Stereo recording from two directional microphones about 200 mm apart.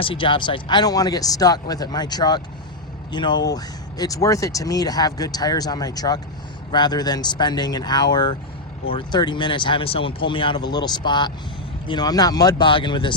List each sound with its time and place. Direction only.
0.0 s speech: 25° left (ahead or behind)